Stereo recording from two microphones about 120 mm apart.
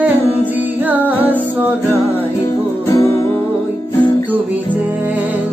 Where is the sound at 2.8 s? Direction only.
25° left (ahead or behind).